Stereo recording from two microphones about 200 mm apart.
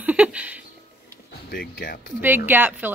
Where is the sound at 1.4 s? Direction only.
45° left (ahead or behind).